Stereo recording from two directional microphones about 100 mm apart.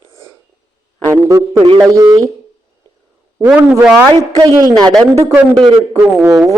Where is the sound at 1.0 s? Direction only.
25° right (ahead or behind).